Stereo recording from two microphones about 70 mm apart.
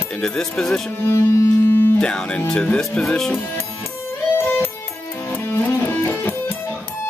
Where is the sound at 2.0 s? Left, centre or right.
Centre.